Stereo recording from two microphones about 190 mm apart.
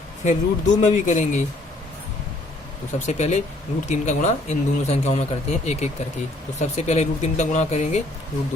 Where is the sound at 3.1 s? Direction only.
35° left (ahead or behind).